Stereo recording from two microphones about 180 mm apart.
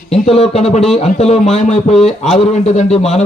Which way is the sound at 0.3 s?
35° left (ahead or behind).